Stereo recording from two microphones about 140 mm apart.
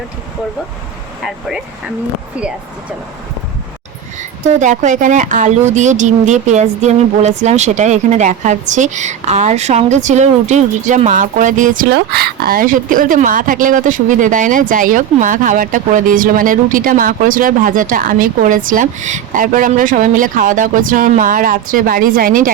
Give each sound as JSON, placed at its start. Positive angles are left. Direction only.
{"t": 1.2, "sound": "speech", "side_deg": -5}
{"t": 4.2, "sound": "speech", "side_deg": -60}